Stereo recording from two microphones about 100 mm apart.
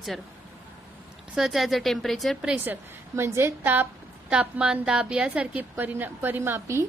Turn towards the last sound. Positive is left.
turn(degrees=-25)  # may be behind; listen again after turning